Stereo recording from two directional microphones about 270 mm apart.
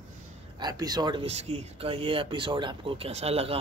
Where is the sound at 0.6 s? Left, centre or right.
Centre.